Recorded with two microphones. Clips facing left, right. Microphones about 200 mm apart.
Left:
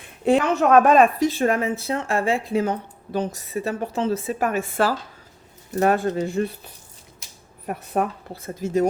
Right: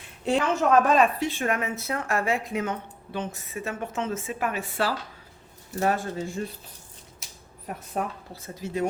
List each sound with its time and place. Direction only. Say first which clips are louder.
0.3 s a woman's voice: left 5 dB; 60° left (ahead or behind)
5.8 s speech: left 6 dB; 60° left (ahead or behind)
7.7 s a woman's voice: left 7 dB; 60° left (ahead or behind); by 8.9 s 45° left (ahead or behind)